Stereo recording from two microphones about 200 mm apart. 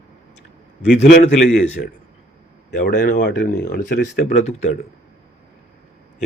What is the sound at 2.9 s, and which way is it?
Speech, 55° left (ahead or behind).